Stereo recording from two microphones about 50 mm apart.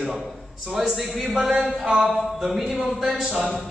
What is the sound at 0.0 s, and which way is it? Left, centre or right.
A man's voice, centre.